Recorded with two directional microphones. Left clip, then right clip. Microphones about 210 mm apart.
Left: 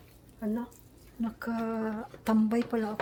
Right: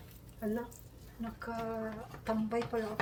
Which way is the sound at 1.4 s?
55° left (ahead or behind).